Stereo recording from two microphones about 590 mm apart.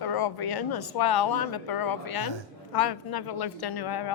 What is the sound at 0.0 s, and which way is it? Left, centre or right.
A woman's voice, left.